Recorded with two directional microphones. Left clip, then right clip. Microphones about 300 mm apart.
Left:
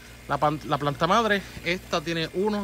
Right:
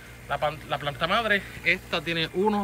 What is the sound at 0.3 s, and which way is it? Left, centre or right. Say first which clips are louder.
A man's voice: left 3 dB; centre.